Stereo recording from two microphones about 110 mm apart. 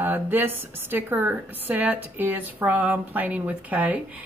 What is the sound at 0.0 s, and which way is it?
A woman's voice, 15° right (ahead or behind).